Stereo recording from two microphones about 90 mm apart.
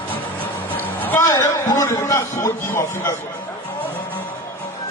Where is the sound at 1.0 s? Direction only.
20° left (ahead or behind).